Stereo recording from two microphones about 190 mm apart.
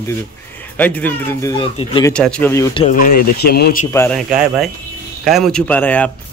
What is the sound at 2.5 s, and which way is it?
Speech, 20° left (ahead or behind).